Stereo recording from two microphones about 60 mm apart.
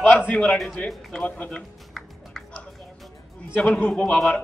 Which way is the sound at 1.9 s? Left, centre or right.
Centre.